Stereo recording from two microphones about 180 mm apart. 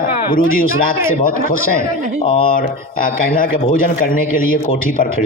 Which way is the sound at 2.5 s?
50° left (ahead or behind).